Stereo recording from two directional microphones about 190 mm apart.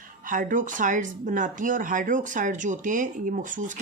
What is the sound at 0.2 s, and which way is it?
Speech, 45° right (ahead or behind).